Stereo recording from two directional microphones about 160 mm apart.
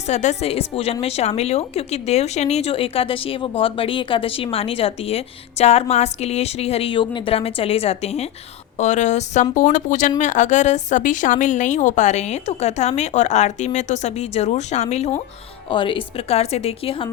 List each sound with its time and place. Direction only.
0.1 s speech: 45° left (ahead or behind)
15.7 s speech: 30° left (ahead or behind)